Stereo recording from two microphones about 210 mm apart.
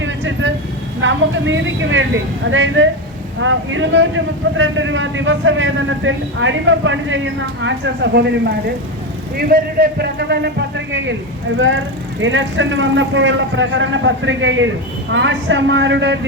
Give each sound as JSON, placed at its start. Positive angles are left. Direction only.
{"t": 0.0, "sound": "vehicle", "side_deg": -60}
{"t": 1.0, "sound": "a man's voice", "side_deg": -65}
{"t": 12.2, "sound": "speech", "side_deg": -65}